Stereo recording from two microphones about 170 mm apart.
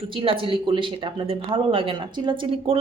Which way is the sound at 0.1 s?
30° right (ahead or behind).